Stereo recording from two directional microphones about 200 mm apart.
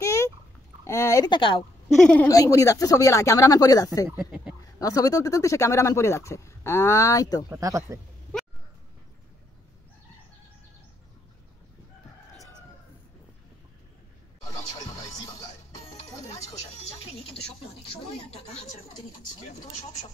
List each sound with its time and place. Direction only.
0.0 s a sound: 15° left (ahead or behind)
0.8 s speech: 15° left (ahead or behind)
2.0 s speech: 5° left (ahead or behind)
2.2 s speech: 15° left (ahead or behind)
4.2 s speech: 5° right (ahead or behind)
4.7 s speech: 15° left (ahead or behind)
7.4 s speech: 15° right (ahead or behind)
14.6 s music: 20° left (ahead or behind)